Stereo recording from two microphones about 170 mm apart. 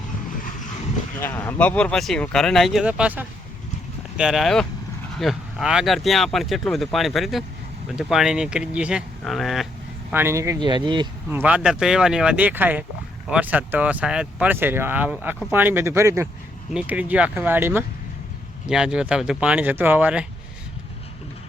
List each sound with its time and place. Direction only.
1.2 s speech: 10° left (ahead or behind)
10.1 s speech: 15° right (ahead or behind)
11.3 s speech: 10° right (ahead or behind)